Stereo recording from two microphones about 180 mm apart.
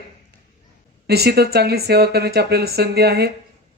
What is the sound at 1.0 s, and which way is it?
Speech, 65° right (ahead or behind).